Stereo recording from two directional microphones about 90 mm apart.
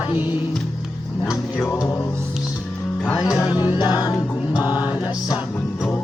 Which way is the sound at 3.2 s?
40° left (ahead or behind).